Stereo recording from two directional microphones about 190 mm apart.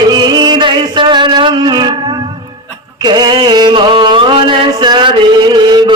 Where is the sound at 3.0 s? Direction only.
20° right (ahead or behind).